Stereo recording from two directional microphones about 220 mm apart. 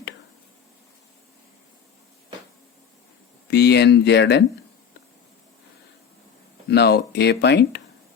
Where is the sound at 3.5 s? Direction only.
50° left (ahead or behind).